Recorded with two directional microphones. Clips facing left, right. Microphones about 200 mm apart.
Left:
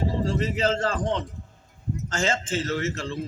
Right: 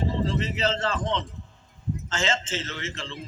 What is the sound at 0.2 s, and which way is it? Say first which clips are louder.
A man's voice: left 2 dB; 45° left (ahead or behind).